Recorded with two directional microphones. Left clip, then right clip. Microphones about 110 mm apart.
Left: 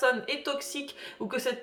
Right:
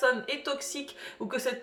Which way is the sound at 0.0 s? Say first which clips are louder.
Even; 25° left (ahead or behind).